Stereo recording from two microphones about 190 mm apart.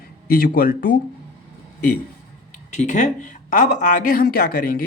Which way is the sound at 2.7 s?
40° left (ahead or behind).